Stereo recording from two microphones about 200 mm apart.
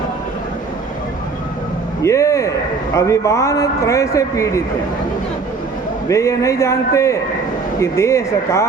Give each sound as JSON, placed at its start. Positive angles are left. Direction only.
{"t": 2.0, "sound": "a man's voice", "side_deg": 15}
{"t": 6.1, "sound": "a man's voice", "side_deg": 15}